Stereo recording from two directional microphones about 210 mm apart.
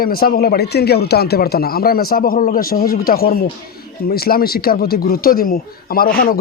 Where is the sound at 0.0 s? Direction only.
45° left (ahead or behind).